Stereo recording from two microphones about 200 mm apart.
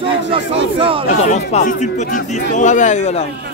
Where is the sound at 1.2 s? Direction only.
35° left (ahead or behind).